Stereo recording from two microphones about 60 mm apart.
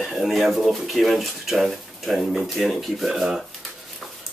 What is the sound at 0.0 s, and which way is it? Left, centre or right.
Speech, centre.